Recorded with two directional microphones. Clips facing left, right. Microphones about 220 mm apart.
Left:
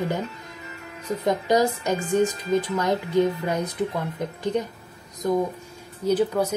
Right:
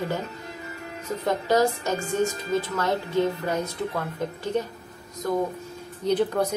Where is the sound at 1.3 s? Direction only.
15° left (ahead or behind).